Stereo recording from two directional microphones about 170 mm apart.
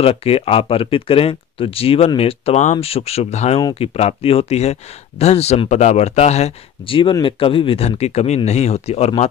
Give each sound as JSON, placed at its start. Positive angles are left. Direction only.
{"t": 0.0, "sound": "speech", "side_deg": 35}